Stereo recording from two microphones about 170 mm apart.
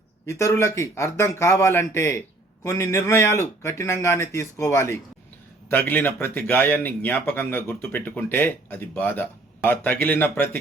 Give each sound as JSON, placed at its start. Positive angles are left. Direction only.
{"t": 0.3, "sound": "speech", "side_deg": 15}